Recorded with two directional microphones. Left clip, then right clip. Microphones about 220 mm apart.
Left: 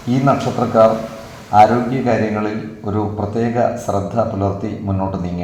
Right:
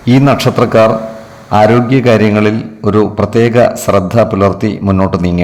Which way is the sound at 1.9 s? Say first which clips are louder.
Right 9 dB; 45° right (ahead or behind).